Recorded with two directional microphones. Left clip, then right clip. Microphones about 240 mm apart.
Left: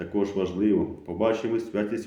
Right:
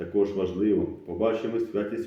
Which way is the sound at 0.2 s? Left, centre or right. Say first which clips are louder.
Right 1 dB; left.